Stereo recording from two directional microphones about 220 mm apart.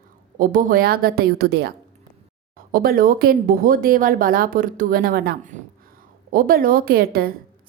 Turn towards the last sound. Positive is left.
turn(degrees=-45)  # may be behind; listen again after turning